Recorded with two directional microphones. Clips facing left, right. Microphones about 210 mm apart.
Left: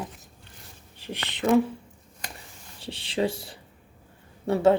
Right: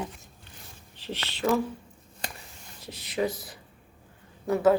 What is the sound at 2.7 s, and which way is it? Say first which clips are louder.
A woman's voice: left 2 dB; 30° left (ahead or behind).